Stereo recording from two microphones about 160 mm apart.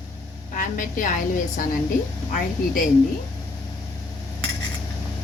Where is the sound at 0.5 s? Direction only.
60° left (ahead or behind).